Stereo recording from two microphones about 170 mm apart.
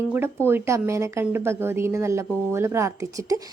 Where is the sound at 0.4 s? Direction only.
15° right (ahead or behind).